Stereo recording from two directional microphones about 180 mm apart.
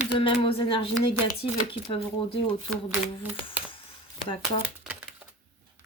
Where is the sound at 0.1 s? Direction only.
30° left (ahead or behind).